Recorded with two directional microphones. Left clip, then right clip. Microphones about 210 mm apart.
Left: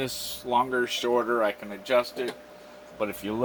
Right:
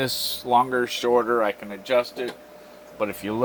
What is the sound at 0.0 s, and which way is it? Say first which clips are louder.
A man's voice: right 6 dB; 35° right (ahead or behind).